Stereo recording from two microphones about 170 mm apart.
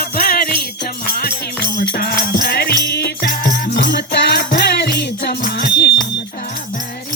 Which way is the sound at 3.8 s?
55° left (ahead or behind).